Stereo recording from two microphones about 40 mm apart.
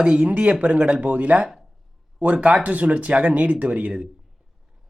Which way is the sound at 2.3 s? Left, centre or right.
Right.